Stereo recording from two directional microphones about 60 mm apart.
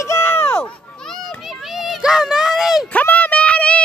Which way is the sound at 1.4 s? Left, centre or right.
Centre.